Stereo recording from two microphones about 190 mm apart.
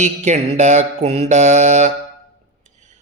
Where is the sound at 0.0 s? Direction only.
35° right (ahead or behind).